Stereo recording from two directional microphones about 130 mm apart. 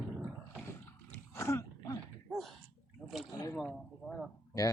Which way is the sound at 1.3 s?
20° left (ahead or behind).